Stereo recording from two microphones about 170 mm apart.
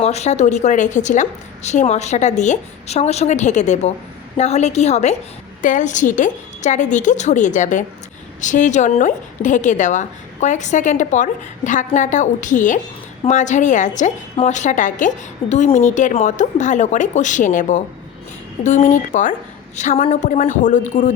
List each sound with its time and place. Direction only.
0.0 s a woman's voice: 40° left (ahead or behind)